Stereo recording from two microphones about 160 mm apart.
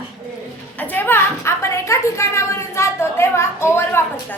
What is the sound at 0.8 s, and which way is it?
A woman's voice, 10° left (ahead or behind).